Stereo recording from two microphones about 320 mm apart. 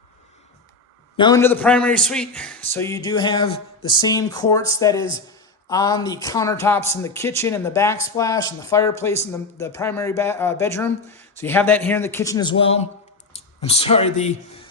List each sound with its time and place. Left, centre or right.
1.1 s a man's voice: centre